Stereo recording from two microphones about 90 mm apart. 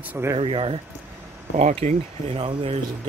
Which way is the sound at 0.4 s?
90° right.